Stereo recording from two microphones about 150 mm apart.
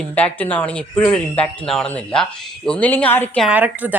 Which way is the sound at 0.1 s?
10° left (ahead or behind).